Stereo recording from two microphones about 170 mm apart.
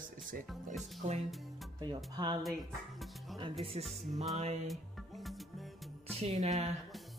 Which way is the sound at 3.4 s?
35° right (ahead or behind).